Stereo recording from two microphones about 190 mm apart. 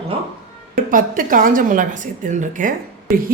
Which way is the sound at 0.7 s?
45° right (ahead or behind).